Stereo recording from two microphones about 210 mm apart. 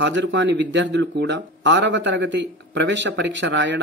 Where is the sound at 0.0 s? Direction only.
60° right (ahead or behind).